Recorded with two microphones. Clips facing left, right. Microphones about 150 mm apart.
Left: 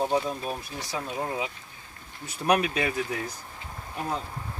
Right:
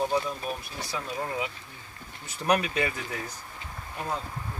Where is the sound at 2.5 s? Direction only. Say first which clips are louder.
Left 1 dB; 15° left (ahead or behind).